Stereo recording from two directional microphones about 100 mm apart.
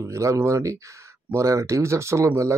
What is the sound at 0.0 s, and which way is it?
Speech, 30° right (ahead or behind).